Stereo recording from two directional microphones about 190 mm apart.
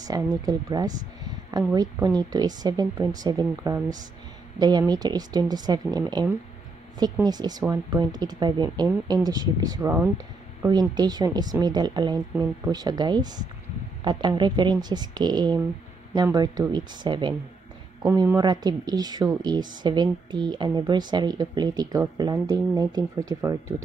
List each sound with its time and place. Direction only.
0.0 s a woman's voice: 20° right (ahead or behind)